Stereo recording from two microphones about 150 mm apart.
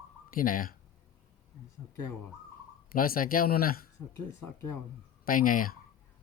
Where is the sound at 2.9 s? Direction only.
70° left (ahead or behind).